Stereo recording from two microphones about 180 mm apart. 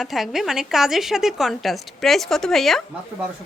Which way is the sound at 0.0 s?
Centre (ahead or behind).